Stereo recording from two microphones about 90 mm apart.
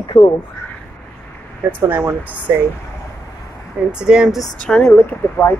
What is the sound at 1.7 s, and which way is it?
Speech, 25° right (ahead or behind).